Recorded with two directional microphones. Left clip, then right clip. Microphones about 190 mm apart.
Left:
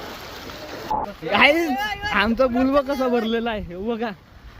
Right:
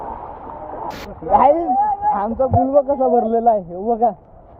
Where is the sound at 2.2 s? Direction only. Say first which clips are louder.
Right 3 dB; 65° left (ahead or behind).